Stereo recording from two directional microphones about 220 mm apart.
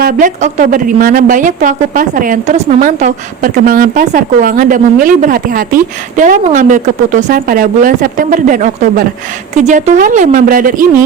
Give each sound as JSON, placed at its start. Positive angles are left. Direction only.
{"t": 0.0, "sound": "a woman's voice", "side_deg": -40}